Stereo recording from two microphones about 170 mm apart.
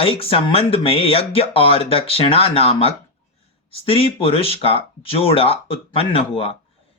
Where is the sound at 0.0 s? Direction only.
35° left (ahead or behind).